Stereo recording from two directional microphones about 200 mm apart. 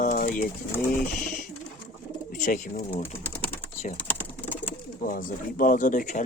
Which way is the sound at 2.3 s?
40° left (ahead or behind).